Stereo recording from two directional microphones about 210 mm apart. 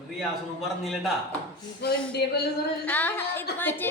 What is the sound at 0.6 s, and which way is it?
Speech, centre (ahead or behind).